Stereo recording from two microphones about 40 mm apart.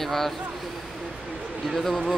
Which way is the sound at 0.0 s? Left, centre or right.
Centre.